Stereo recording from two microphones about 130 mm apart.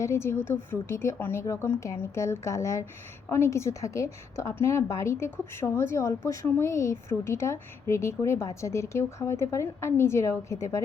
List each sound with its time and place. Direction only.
0.0 s a woman's voice: 20° left (ahead or behind)